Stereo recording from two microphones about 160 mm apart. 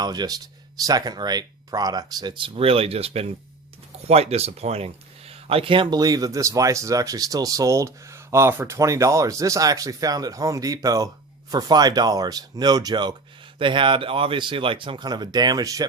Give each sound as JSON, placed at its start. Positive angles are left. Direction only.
{"t": 0.0, "sound": "speech", "side_deg": -25}